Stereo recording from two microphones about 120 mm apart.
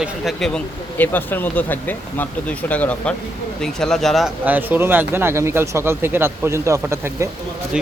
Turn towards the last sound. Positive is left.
turn(degrees=-25)  # may be behind; listen again after turning